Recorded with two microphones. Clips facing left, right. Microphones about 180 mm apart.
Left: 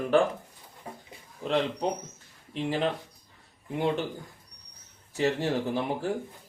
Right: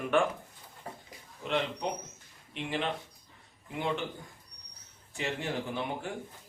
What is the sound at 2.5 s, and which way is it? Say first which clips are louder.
Speech: left 6 dB; 35° left (ahead or behind).